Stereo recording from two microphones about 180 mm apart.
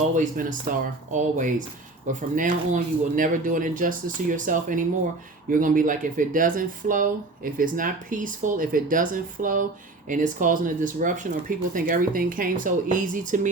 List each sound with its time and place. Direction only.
0.1 s speech: 45° right (ahead or behind)